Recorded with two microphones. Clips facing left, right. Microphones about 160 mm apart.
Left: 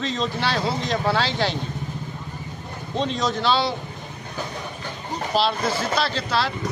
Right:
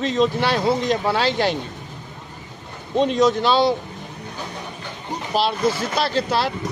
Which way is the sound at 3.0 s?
50° right (ahead or behind).